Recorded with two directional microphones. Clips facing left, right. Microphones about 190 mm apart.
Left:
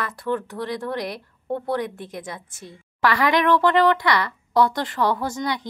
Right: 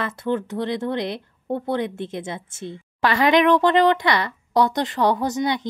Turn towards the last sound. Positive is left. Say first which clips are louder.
# right 4 dB
turn(degrees=-20)  # may be behind; listen again after turning